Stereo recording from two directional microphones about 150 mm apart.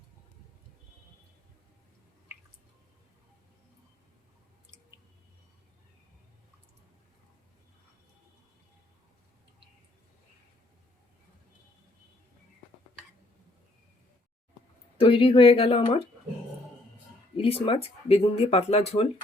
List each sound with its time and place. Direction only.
14.9 s speech: 35° left (ahead or behind)
17.3 s speech: 40° left (ahead or behind)